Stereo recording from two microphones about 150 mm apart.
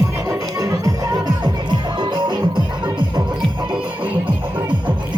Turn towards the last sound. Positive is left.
turn(degrees=-30)  # may be behind; listen again after turning